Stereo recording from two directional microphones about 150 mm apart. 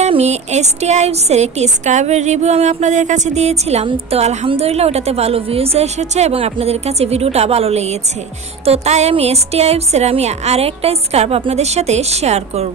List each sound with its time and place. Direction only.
0.0 s a woman's voice: 45° right (ahead or behind)